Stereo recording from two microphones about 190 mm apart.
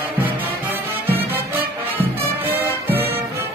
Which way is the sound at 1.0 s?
10° right (ahead or behind).